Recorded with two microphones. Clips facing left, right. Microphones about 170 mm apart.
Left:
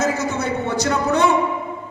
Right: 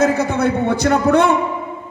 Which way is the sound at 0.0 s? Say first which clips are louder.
Right 6 dB; 55° right (ahead or behind).